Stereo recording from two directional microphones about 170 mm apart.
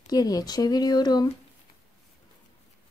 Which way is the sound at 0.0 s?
20° left (ahead or behind).